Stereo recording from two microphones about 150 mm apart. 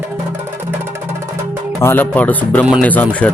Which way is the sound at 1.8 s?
15° left (ahead or behind).